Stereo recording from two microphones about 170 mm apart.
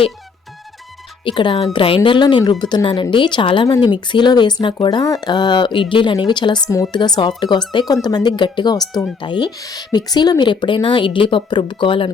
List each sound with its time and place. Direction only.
1.2 s a woman's voice: 30° left (ahead or behind)